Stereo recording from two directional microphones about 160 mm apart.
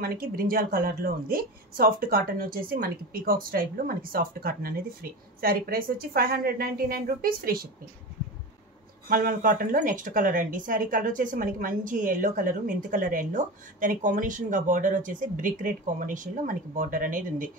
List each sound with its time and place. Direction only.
0.0 s a woman's voice: 65° right (ahead or behind)
9.1 s speech: 60° right (ahead or behind)